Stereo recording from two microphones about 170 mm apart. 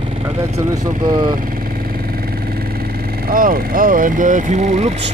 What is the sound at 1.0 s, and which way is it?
Speech, 25° right (ahead or behind).